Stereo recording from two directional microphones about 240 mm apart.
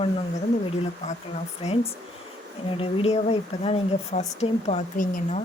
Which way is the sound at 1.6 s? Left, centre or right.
Left.